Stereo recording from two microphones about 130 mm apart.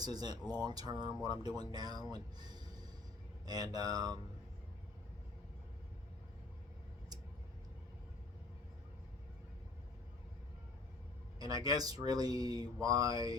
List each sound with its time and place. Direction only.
0.0 s speech: 30° right (ahead or behind)
11.3 s speech: 30° right (ahead or behind)